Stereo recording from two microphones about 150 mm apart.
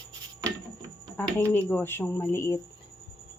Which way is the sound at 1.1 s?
10° left (ahead or behind).